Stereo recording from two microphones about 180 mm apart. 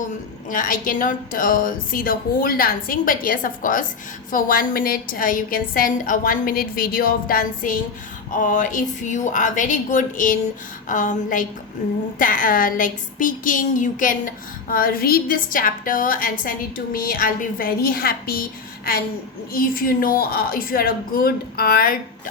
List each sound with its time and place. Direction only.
0.5 s a woman's voice: 50° left (ahead or behind)
19.5 s a woman's voice: 55° left (ahead or behind)